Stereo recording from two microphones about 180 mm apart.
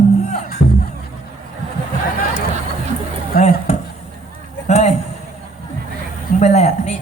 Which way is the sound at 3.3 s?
55° left (ahead or behind).